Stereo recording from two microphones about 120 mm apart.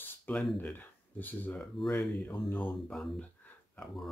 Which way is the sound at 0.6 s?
15° left (ahead or behind).